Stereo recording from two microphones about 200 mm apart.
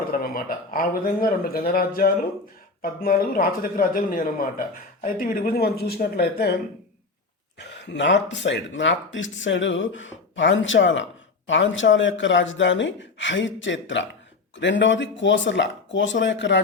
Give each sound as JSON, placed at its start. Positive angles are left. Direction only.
{"t": 0.1, "sound": "speech", "side_deg": 45}
{"t": 7.6, "sound": "speech", "side_deg": 60}